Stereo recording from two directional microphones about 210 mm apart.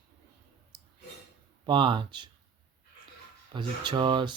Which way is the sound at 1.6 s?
25° right (ahead or behind).